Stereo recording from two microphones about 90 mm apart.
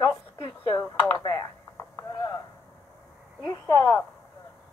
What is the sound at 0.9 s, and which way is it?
Speech, 45° left (ahead or behind).